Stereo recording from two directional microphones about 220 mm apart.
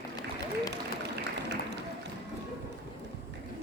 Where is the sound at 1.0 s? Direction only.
50° right (ahead or behind).